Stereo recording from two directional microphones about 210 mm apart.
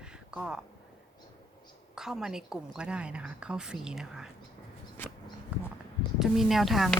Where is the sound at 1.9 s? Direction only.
Centre (ahead or behind).